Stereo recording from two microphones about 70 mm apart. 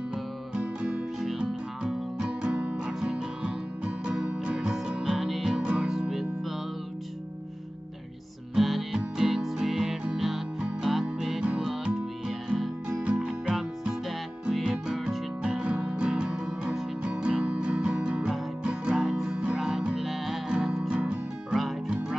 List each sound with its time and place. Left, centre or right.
0.1 s music: centre
5.0 s music: centre
5.6 s music: centre
5.9 s music: centre
8.5 s music: centre